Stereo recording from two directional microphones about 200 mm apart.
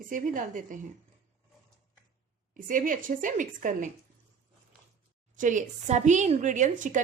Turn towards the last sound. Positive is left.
turn(degrees=-40)  # may be behind; listen again after turning